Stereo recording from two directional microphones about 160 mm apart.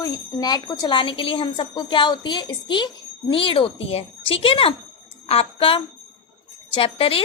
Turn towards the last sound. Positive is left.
turn(degrees=35)  # may be behind; listen again after turning